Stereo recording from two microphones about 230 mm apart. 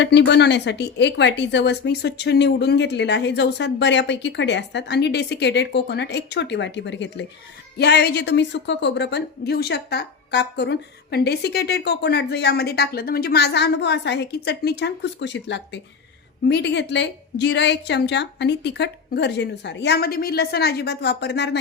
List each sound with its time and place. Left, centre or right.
0.0 s a woman's voice: left